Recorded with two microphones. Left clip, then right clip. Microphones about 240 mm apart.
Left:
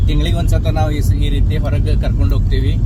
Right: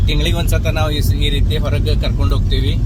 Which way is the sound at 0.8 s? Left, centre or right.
Centre.